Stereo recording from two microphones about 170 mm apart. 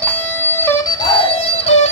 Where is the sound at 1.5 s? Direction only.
40° left (ahead or behind).